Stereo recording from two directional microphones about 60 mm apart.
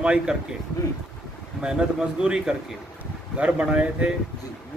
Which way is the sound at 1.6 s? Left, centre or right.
Centre.